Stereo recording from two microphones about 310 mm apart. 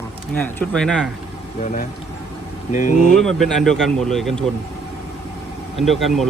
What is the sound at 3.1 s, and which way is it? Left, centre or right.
A man's voice, centre.